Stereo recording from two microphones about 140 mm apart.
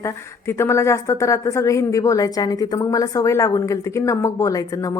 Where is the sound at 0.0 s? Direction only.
20° left (ahead or behind).